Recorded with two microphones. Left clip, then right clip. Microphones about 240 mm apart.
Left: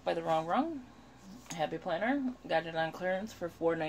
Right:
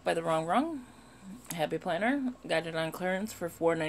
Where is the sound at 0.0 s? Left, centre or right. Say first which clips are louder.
Right 2 dB; right.